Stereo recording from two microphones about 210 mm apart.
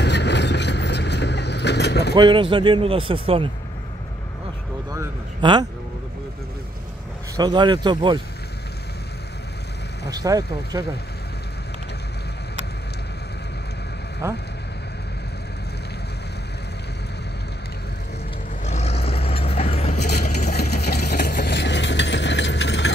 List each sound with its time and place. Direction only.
0.0 s vehicle: 55° left (ahead or behind)
2.1 s speech: 20° right (ahead or behind)
4.9 s a sound: 20° right (ahead or behind)
7.3 s speech: 20° right (ahead or behind)
10.0 s speech: 15° right (ahead or behind)
14.2 s speech: 15° right (ahead or behind)
18.6 s vehicle: 30° left (ahead or behind)
20.3 s vehicle: 45° left (ahead or behind)